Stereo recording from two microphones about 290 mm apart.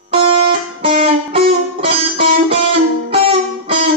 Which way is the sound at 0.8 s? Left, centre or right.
Centre.